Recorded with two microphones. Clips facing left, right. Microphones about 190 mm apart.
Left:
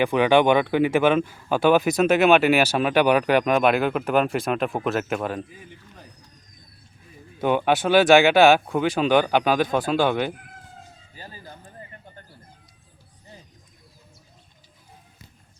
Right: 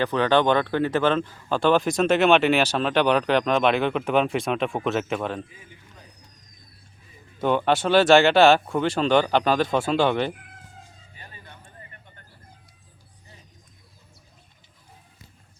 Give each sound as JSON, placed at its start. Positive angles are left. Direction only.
{"t": 0.0, "sound": "speech", "side_deg": 10}
{"t": 7.4, "sound": "speech", "side_deg": 10}
{"t": 8.6, "sound": "speech", "side_deg": 0}
{"t": 11.1, "sound": "a sound", "side_deg": 30}